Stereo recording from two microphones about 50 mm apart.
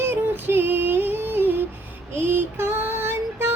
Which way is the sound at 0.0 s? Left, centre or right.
Right.